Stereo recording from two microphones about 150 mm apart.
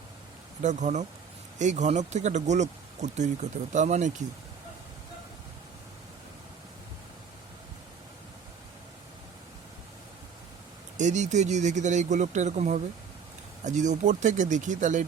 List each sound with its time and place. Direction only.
0.6 s speech: 55° right (ahead or behind)
10.9 s speech: 55° right (ahead or behind)